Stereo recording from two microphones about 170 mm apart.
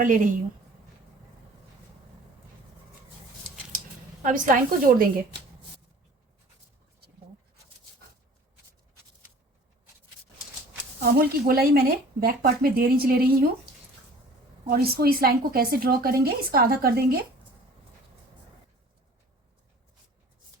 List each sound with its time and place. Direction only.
0.0 s a woman's voice: 50° right (ahead or behind)
4.2 s a woman's voice: 50° right (ahead or behind)
11.0 s speech: 60° right (ahead or behind)
14.7 s speech: 65° right (ahead or behind)